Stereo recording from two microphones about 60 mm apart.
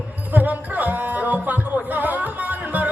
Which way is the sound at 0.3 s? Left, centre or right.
Right.